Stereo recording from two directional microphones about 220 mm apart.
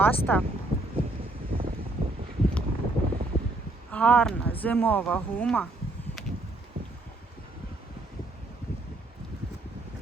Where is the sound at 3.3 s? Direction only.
30° left (ahead or behind).